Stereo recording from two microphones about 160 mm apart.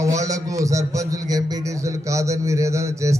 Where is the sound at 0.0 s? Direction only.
20° right (ahead or behind).